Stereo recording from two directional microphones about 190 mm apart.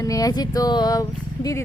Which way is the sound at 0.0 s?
20° left (ahead or behind).